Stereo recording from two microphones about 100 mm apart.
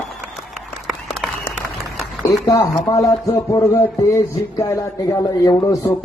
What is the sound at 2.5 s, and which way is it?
A man's voice, 30° left (ahead or behind).